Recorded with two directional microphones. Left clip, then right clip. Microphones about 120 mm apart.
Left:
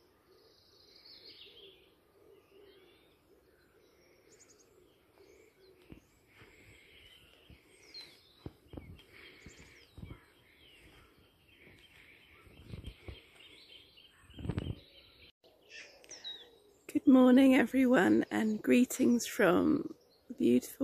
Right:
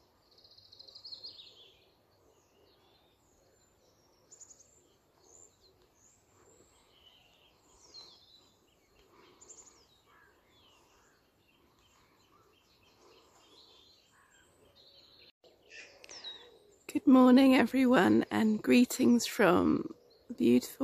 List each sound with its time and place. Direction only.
15.7 s bird: 5° left (ahead or behind)
16.2 s speech: 20° right (ahead or behind)